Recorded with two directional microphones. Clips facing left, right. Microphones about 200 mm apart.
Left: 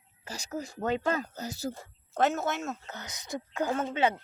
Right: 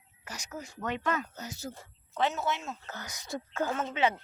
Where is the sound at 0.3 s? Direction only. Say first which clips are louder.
Left 5 dB; 30° left (ahead or behind).